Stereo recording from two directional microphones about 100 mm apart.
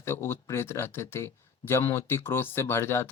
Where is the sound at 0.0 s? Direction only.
25° left (ahead or behind).